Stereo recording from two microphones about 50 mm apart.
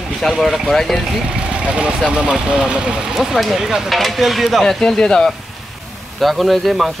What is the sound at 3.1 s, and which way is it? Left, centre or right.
Speech, centre.